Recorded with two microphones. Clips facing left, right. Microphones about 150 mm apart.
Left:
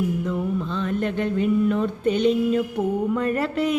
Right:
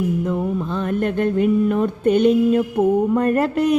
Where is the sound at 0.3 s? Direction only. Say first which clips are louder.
Right 3 dB; 50° right (ahead or behind).